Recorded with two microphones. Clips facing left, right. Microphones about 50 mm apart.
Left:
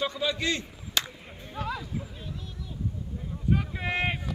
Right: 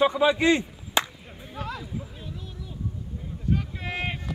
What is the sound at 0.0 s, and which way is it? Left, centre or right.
Speech, right.